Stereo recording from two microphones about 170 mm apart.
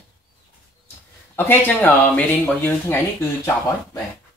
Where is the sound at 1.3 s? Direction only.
10° left (ahead or behind).